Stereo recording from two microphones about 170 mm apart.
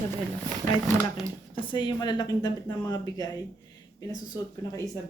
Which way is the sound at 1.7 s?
30° left (ahead or behind).